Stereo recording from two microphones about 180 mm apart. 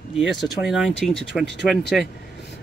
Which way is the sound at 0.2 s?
Centre (ahead or behind).